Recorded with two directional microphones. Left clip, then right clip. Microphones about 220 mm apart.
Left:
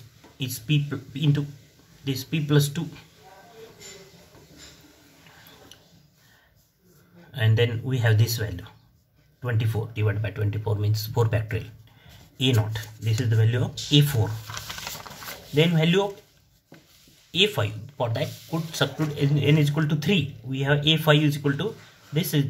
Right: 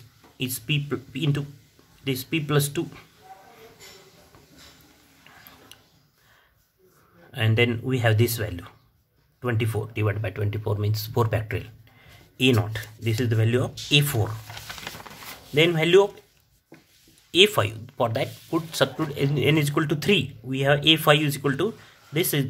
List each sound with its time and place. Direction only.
0.4 s speech: 35° right (ahead or behind)
7.3 s speech: 40° right (ahead or behind)
15.5 s speech: 40° right (ahead or behind)
17.3 s speech: 40° right (ahead or behind)